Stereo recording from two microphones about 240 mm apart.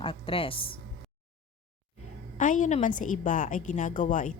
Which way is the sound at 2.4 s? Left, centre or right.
Left.